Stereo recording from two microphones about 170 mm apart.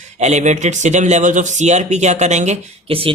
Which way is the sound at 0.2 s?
40° right (ahead or behind).